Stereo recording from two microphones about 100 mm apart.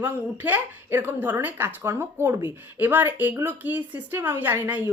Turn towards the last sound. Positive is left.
turn(degrees=-20)  # may be behind; listen again after turning